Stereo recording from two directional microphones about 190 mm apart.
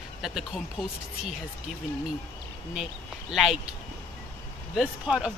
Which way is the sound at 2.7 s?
Centre (ahead or behind).